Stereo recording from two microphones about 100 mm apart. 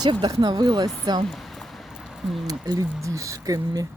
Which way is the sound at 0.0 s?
45° right (ahead or behind).